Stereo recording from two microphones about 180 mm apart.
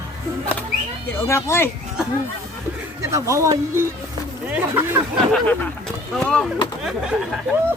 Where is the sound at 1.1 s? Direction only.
15° left (ahead or behind).